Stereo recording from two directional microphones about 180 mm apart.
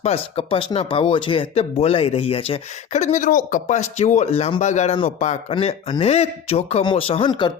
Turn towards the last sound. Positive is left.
turn(degrees=25)  # may be behind; listen again after turning